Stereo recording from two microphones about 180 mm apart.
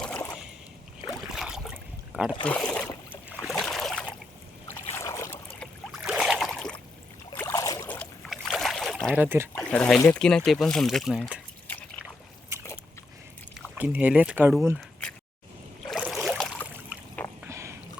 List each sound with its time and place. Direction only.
0.0 s a sound: 5° left (ahead or behind)
1.3 s a sound: 5° right (ahead or behind)
2.4 s speech: 5° left (ahead or behind)
3.4 s a sound: centre (ahead or behind)
4.7 s boat: 15° left (ahead or behind)
5.9 s boat: centre (ahead or behind)
7.3 s boat: 15° left (ahead or behind)
7.9 s boat: 5° left (ahead or behind)
9.1 s speech: 10° right (ahead or behind)
9.6 s speech: 5° left (ahead or behind)
13.7 s speech: 10° right (ahead or behind)
16.1 s a sound: centre (ahead or behind)
17.4 s rowboat: 15° right (ahead or behind)